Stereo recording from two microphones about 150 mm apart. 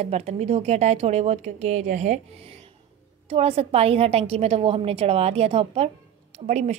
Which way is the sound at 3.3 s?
40° right (ahead or behind).